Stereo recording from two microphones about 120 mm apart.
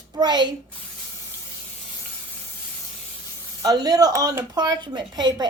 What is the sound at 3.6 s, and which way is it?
Speech, 30° right (ahead or behind).